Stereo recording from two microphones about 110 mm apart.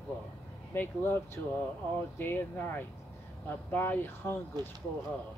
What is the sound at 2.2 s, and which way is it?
Speech, 20° left (ahead or behind).